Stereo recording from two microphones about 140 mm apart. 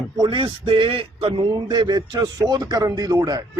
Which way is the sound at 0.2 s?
35° right (ahead or behind).